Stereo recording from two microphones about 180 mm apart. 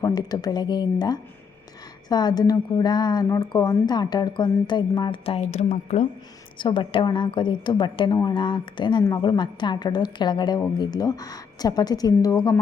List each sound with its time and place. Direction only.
0.0 s a woman's voice: 20° left (ahead or behind); by 6.1 s 40° left (ahead or behind)
6.6 s a woman's voice: 25° left (ahead or behind)